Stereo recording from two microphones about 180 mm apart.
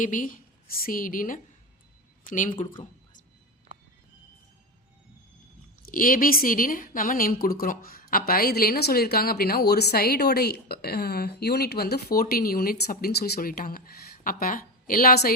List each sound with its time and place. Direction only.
0.0 s a woman's voice: 45° left (ahead or behind)
5.8 s a woman's voice: 50° left (ahead or behind)